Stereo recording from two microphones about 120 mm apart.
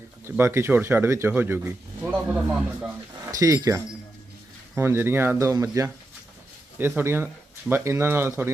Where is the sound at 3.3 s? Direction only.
30° right (ahead or behind).